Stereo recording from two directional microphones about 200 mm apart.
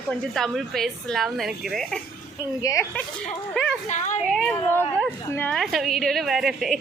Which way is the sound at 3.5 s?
5° left (ahead or behind).